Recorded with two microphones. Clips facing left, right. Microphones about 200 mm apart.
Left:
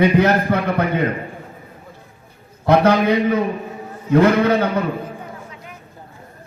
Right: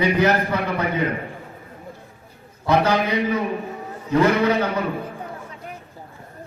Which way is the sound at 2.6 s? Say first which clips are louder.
Left 5 dB; 55° left (ahead or behind).